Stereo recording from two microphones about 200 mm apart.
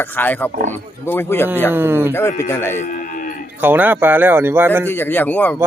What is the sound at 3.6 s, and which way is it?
Speech, 10° right (ahead or behind).